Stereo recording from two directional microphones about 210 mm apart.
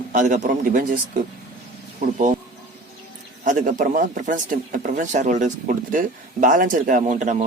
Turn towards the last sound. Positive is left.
turn(degrees=-35)  # may be behind; listen again after turning